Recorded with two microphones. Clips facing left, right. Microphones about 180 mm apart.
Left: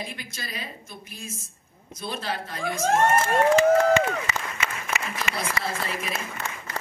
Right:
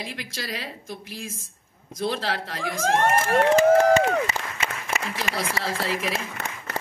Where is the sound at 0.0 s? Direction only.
90° right.